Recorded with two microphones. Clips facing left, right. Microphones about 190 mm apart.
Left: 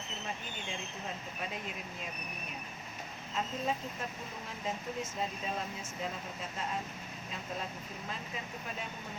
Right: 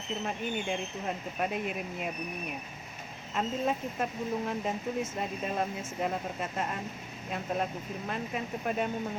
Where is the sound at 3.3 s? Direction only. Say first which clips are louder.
Right 5 dB; 60° right (ahead or behind).